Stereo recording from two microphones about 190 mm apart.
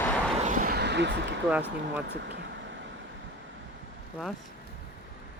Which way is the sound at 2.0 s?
65° right (ahead or behind).